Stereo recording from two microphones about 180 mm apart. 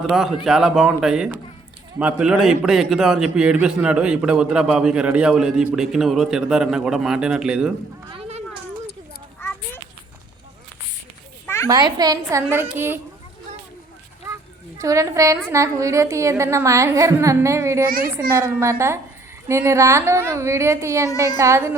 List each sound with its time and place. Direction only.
0.0 s a man's voice: centre (ahead or behind)
8.1 s a sound: 35° right (ahead or behind)
11.4 s children playing: 15° left (ahead or behind)
11.7 s a woman's voice: 20° right (ahead or behind)
14.8 s a woman's voice: 15° right (ahead or behind)
17.8 s a child's voice: 55° right (ahead or behind)
18.1 s a woman's voice: 15° right (ahead or behind)